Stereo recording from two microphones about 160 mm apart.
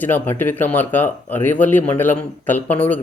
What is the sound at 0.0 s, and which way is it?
Speech, 10° left (ahead or behind).